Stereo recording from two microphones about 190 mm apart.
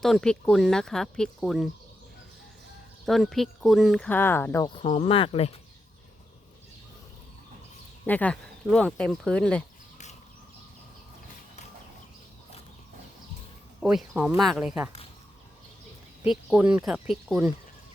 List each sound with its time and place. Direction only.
0.0 s speech: 5° left (ahead or behind)
3.1 s speech: centre (ahead or behind)
4.7 s speech: 30° left (ahead or behind)
8.0 s speech: 10° left (ahead or behind)
13.8 s speech: 5° right (ahead or behind)
16.2 s speech: 5° right (ahead or behind)